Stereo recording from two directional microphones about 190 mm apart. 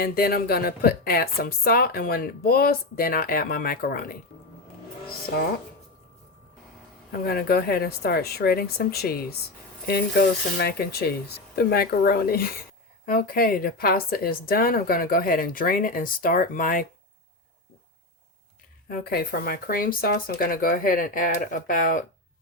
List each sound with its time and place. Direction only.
0.0 s speech: 55° left (ahead or behind)
7.1 s a woman's voice: 55° left (ahead or behind)
18.9 s speech: 55° left (ahead or behind)